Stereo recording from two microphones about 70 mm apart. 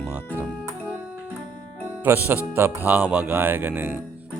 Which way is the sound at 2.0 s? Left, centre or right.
Right.